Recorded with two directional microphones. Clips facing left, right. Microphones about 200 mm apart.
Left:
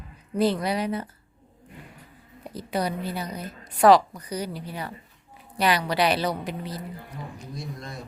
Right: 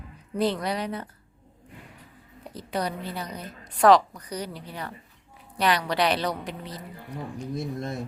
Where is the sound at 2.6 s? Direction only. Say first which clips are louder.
Left 2 dB; 10° left (ahead or behind).